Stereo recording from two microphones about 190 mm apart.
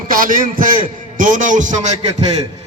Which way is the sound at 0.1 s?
45° right (ahead or behind).